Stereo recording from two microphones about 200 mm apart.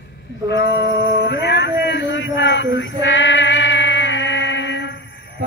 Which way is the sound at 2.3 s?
65° left (ahead or behind).